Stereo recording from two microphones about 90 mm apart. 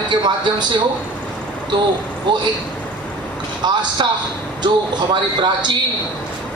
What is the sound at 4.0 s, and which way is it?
A man's voice, 65° right (ahead or behind).